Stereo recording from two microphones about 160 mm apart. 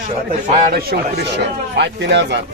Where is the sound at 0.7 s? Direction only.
85° right.